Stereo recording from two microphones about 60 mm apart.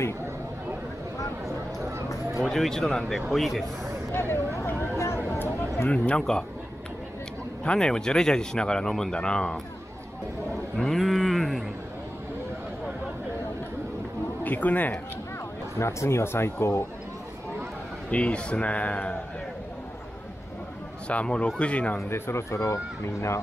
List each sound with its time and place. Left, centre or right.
2.4 s speech: centre
4.1 s speech: left
4.6 s a sound: left
5.9 s speech: centre
7.6 s speech: centre
10.8 s a sound: centre
14.4 s speech: left
15.8 s speech: left
18.1 s speech: centre
21.1 s speech: left
22.1 s speech: left